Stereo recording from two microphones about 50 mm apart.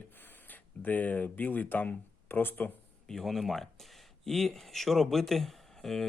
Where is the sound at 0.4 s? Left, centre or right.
Left.